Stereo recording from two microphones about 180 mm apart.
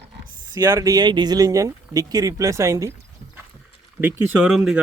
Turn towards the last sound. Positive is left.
turn(degrees=-5)  # may be behind; listen again after turning